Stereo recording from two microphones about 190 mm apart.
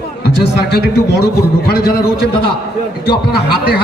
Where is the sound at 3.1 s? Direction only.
55° left (ahead or behind).